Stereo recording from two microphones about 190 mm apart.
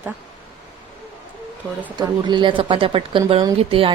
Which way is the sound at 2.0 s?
25° right (ahead or behind).